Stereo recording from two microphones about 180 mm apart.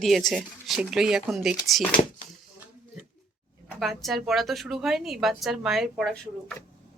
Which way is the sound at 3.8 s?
Centre (ahead or behind).